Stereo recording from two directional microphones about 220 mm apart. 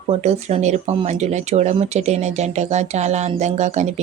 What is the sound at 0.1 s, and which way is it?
Speech, 30° right (ahead or behind).